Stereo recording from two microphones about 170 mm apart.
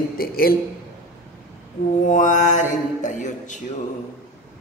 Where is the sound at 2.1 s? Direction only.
45° left (ahead or behind).